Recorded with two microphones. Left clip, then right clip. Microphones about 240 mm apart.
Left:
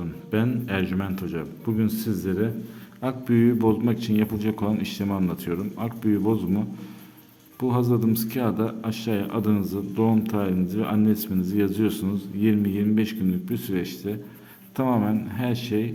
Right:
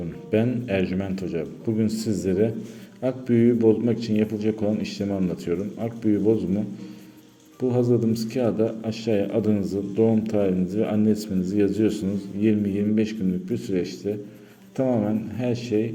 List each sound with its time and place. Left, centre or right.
0.3 s a man's voice: centre
7.7 s a man's voice: left